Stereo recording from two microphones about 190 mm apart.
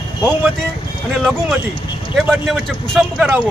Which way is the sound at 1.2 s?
Centre (ahead or behind).